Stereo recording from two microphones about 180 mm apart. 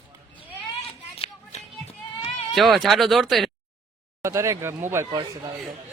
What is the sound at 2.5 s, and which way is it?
Speech, centre (ahead or behind).